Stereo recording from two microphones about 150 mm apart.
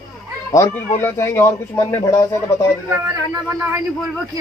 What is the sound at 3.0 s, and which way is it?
Speech, 25° right (ahead or behind).